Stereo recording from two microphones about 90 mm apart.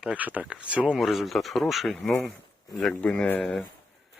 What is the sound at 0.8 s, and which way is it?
Speech, centre (ahead or behind).